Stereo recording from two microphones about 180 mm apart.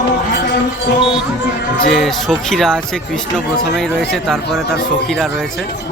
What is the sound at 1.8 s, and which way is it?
Speech, centre (ahead or behind).